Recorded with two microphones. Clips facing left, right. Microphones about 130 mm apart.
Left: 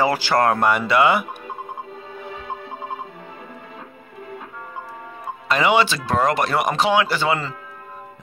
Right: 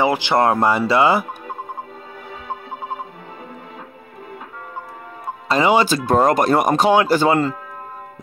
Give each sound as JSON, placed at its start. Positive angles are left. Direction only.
{"t": 0.0, "sound": "speech", "side_deg": -20}
{"t": 5.5, "sound": "speech", "side_deg": -35}